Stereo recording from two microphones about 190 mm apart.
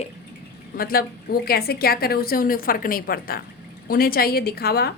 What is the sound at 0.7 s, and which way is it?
A woman's voice, 50° left (ahead or behind).